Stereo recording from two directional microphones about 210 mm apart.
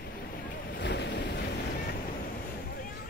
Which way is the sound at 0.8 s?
55° left (ahead or behind).